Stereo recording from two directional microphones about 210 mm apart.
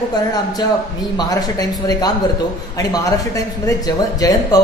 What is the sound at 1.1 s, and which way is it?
Speech, 20° left (ahead or behind).